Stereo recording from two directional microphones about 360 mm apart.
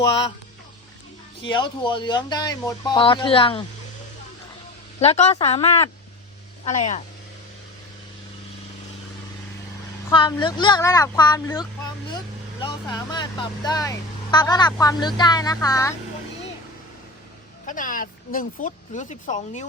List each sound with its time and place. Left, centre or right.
1.4 s speech: centre
4.9 s speech: centre
10.1 s speech: centre
17.7 s speech: left